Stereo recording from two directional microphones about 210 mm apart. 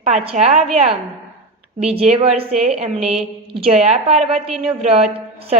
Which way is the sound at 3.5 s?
30° right (ahead or behind).